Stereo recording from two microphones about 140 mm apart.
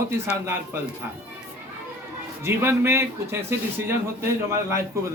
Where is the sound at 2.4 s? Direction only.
20° right (ahead or behind).